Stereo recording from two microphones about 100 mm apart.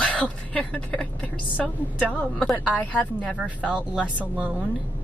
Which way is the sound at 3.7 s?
15° right (ahead or behind).